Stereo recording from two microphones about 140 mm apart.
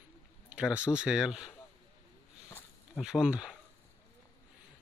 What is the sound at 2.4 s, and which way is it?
Walk, 20° left (ahead or behind).